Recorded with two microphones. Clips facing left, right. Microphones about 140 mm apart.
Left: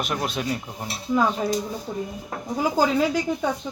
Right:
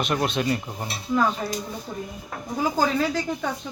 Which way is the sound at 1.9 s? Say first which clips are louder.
Left 3 dB; 20° left (ahead or behind).